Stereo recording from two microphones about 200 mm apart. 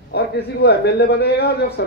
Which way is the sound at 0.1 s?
55° left (ahead or behind).